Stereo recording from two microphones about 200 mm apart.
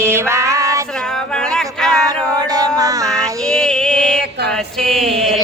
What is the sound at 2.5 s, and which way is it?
Music, 20° right (ahead or behind).